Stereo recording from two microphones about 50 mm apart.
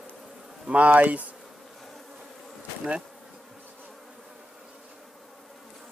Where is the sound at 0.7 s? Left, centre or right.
Right.